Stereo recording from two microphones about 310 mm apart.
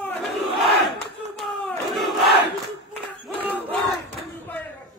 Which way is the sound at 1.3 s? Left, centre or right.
Centre.